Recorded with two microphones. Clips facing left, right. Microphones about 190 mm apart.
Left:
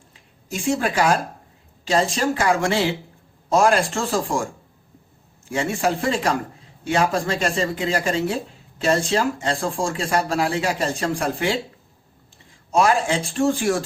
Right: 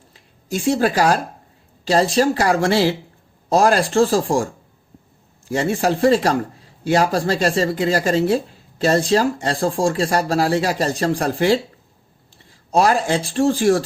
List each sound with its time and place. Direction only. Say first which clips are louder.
0.1 s speech: right 6 dB; 35° right (ahead or behind)
5.5 s speech: right 3 dB; 35° right (ahead or behind)